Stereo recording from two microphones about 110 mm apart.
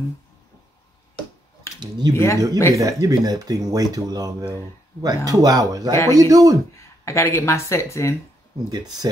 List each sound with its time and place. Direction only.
1.8 s speech: 40° right (ahead or behind)
2.1 s speech: 25° left (ahead or behind)
2.7 s speech: 30° right (ahead or behind)
7.1 s speech: 25° left (ahead or behind)
8.6 s speech: 35° right (ahead or behind)